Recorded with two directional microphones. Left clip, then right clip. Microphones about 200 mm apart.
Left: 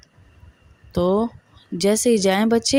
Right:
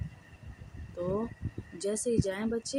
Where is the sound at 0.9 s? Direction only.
50° left (ahead or behind).